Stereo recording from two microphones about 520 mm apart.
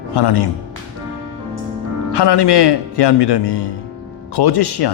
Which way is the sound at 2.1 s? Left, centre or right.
Left.